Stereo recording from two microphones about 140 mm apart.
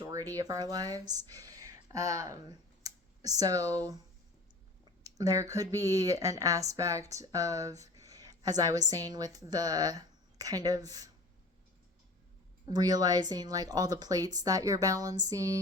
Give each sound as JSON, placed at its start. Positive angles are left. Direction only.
{"t": 0.0, "sound": "speech", "side_deg": -25}
{"t": 5.0, "sound": "speech", "side_deg": -25}
{"t": 12.7, "sound": "speech", "side_deg": -30}